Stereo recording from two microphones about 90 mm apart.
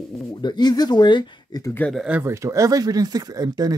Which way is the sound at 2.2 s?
35° right (ahead or behind).